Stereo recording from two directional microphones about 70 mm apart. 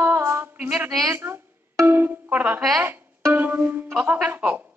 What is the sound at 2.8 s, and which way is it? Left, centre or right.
Pizzicato, right.